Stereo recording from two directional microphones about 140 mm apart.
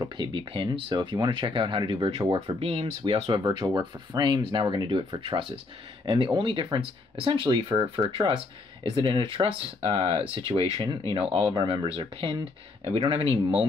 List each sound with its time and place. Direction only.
0.0 s speech: 35° right (ahead or behind)